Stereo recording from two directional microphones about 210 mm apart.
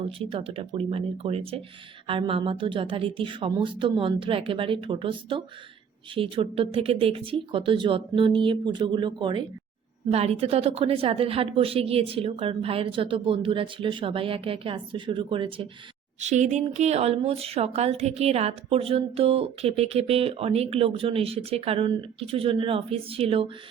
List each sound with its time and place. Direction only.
0.2 s speech: 25° right (ahead or behind)